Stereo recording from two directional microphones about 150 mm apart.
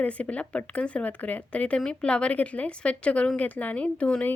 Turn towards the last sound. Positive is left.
turn(degrees=10)  # may be behind; listen again after turning